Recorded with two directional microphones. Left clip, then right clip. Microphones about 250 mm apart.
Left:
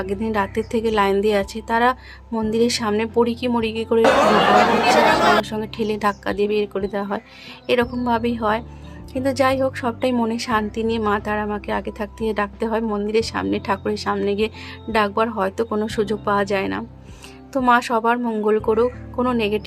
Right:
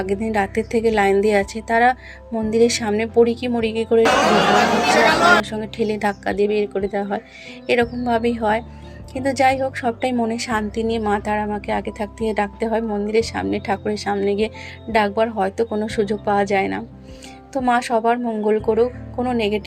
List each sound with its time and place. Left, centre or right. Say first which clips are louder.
0.0 s a woman's voice: right 2 dB; centre
5.5 s a woman's voice: right 1 dB; centre